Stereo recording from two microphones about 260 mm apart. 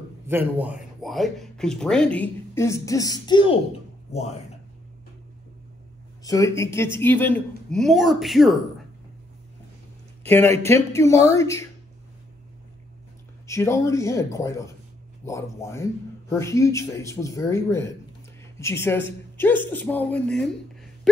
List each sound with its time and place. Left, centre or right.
0.3 s speech: centre; by 4.6 s left
6.2 s a man's voice: centre
10.2 s a man's voice: centre
13.5 s a man's voice: centre